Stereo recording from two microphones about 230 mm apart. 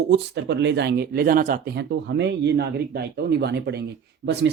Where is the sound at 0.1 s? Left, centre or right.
Right.